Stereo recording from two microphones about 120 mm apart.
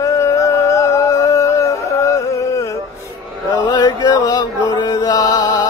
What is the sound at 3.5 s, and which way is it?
Chant, 35° left (ahead or behind).